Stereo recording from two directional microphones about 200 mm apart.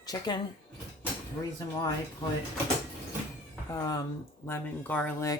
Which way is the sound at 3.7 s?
20° left (ahead or behind).